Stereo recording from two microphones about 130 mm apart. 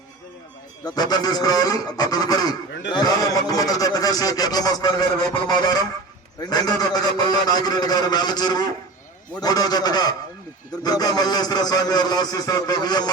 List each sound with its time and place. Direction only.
0.9 s speech: 30° left (ahead or behind)